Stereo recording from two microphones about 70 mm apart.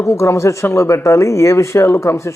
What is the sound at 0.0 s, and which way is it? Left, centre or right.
Speech, left.